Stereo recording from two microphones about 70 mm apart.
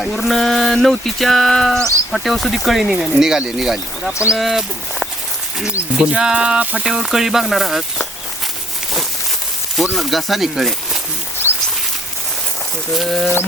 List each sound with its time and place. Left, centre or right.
0.0 s speech: centre
6.0 s speech: centre
6.8 s speech: centre
9.7 s speech: centre
11.4 s a sound: left
12.9 s speech: centre